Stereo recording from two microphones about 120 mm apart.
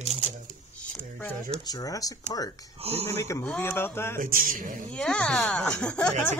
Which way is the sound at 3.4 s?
15° left (ahead or behind).